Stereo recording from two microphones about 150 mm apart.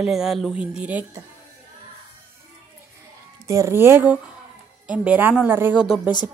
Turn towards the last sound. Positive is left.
turn(degrees=-5)  # may be behind; listen again after turning